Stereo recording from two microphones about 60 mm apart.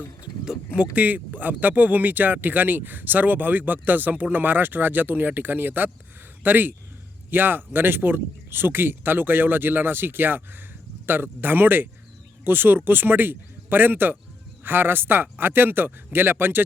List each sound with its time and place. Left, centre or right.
0.9 s speech: right